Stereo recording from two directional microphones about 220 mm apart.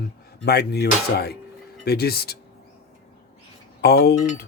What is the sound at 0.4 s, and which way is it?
Speech, 50° left (ahead or behind).